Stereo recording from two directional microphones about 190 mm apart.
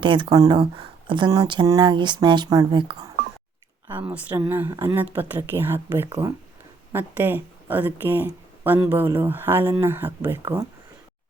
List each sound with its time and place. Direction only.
0.0 s speech: 25° right (ahead or behind)
4.0 s speech: 10° right (ahead or behind)